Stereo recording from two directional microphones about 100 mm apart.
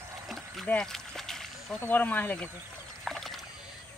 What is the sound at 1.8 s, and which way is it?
Speech, 20° left (ahead or behind).